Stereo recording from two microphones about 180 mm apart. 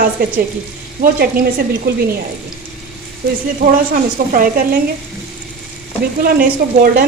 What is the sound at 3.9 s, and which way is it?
Speech, 50° right (ahead or behind).